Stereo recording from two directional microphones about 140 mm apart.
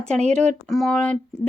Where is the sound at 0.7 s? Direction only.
5° left (ahead or behind).